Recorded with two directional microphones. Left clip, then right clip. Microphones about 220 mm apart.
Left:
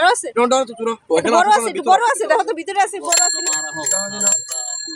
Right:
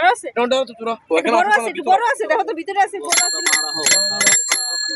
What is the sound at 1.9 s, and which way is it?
Speech, 10° left (ahead or behind).